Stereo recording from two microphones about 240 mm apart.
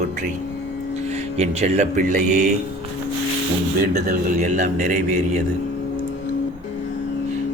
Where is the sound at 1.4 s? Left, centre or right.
Right.